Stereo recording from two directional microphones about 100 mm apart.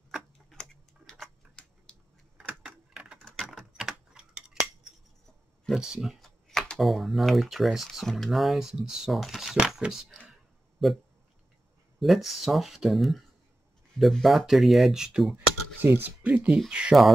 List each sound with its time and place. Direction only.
0.1 s tick-tock: 5° left (ahead or behind)
2.6 s a sound: 10° right (ahead or behind)
3.2 s mechanisms: 5° left (ahead or behind)
3.5 s typing: 5° right (ahead or behind)
5.7 s speech: 5° right (ahead or behind)
12.0 s speech: centre (ahead or behind)
15.3 s speech: 20° right (ahead or behind)